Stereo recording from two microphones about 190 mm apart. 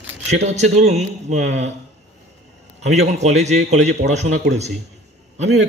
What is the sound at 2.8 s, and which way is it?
A man's voice, 35° right (ahead or behind).